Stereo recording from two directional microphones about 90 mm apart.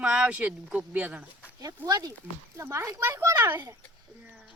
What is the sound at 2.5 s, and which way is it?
Speech, 30° right (ahead or behind).